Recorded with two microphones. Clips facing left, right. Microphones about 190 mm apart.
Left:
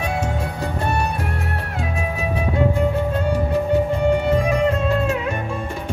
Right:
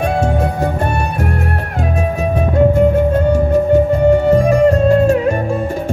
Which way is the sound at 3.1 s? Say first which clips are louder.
Right 7 dB; 45° right (ahead or behind).